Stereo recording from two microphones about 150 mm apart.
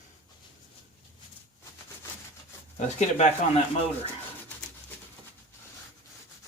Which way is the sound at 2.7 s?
50° left (ahead or behind).